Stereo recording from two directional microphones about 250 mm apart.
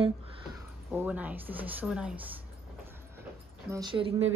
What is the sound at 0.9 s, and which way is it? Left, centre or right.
Speech, centre.